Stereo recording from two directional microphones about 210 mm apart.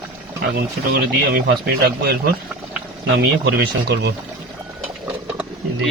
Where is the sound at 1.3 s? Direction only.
50° right (ahead or behind).